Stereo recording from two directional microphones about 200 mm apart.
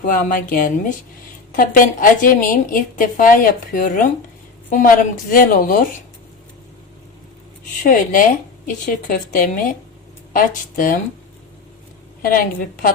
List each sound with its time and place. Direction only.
0.0 s a woman's voice: 40° left (ahead or behind)
7.9 s a woman's voice: 40° left (ahead or behind)
12.2 s a woman's voice: 45° left (ahead or behind)